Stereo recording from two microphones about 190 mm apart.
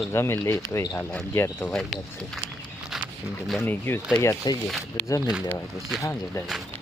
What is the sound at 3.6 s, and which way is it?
Speech, 10° left (ahead or behind).